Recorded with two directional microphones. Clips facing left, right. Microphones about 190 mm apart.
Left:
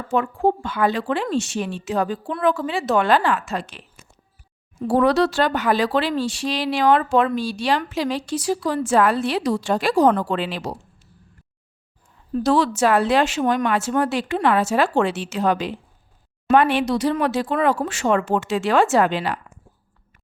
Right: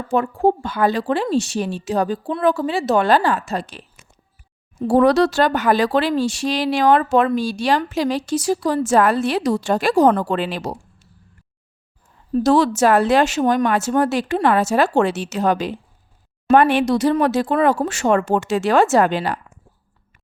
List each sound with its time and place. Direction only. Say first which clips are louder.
0.1 s a woman's voice: right 3 dB; 40° right (ahead or behind)
4.9 s speech: right 3 dB; 45° right (ahead or behind)
12.3 s speech: right 3 dB; 45° right (ahead or behind)